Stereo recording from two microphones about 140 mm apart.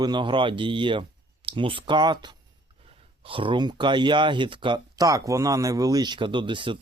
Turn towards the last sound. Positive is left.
turn(degrees=-35)  # may be behind; listen again after turning